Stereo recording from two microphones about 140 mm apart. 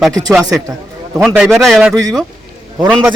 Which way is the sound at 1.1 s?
Centre (ahead or behind).